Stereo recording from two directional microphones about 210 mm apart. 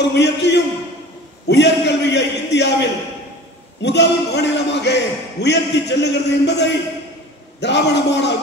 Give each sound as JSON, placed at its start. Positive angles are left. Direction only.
{"t": 0.1, "sound": "a man's voice", "side_deg": 55}